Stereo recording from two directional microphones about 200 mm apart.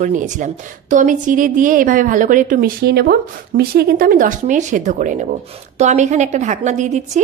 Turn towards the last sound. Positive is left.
turn(degrees=-35)  # may be behind; listen again after turning